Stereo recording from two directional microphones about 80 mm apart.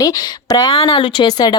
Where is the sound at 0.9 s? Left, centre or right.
Left.